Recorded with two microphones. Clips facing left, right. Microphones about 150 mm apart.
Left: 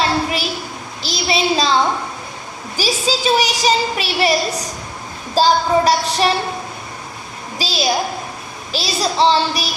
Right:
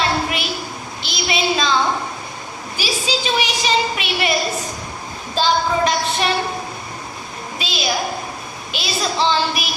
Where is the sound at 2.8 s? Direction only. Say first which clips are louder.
Left 4 dB; 40° left (ahead or behind).